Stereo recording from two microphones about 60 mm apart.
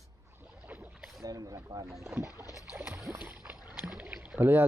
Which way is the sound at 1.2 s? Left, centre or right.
Right.